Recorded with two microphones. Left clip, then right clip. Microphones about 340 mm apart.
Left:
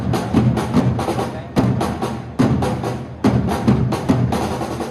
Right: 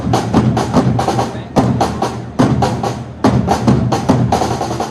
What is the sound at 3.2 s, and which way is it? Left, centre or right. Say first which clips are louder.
Music: right 6 dB; centre.